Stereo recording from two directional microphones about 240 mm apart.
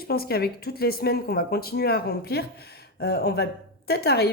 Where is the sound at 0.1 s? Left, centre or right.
Left.